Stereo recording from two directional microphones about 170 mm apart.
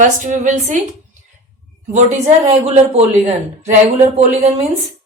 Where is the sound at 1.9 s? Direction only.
40° right (ahead or behind).